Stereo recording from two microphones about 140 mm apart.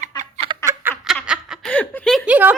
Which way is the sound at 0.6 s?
15° right (ahead or behind).